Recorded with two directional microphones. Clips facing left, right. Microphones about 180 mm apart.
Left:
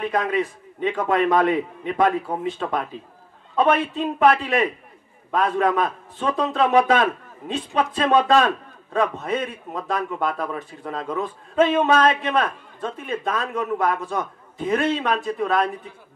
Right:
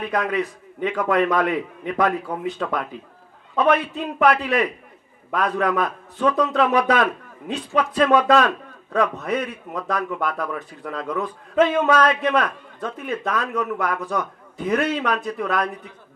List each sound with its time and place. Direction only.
0.1 s a man's voice: 25° left (ahead or behind)